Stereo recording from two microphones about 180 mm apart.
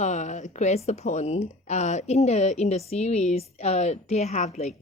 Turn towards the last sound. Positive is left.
turn(degrees=40)  # may be behind; listen again after turning